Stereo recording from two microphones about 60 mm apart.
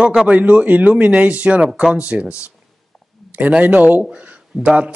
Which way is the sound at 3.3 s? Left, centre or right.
Right.